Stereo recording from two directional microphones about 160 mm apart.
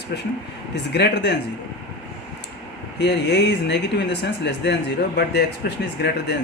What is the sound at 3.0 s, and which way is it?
Speech, 90° left.